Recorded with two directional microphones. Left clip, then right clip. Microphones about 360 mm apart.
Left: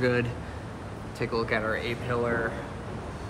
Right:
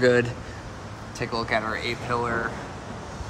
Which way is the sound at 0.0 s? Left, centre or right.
Centre.